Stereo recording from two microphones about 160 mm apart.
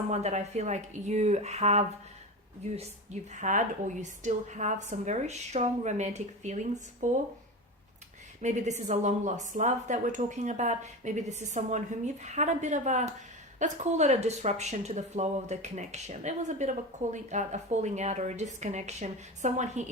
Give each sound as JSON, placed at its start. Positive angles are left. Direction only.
{"t": 0.1, "sound": "speech", "side_deg": -45}
{"t": 8.4, "sound": "speech", "side_deg": -45}